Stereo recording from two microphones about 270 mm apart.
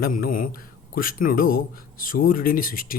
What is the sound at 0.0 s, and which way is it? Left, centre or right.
Speech, left.